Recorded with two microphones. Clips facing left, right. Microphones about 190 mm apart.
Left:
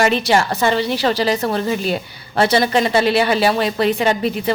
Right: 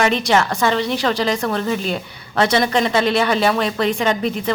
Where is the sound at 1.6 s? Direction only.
5° left (ahead or behind).